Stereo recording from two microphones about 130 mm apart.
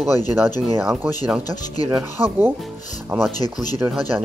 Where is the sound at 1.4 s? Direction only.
30° left (ahead or behind).